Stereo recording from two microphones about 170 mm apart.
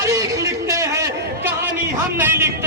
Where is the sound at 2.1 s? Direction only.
15° right (ahead or behind).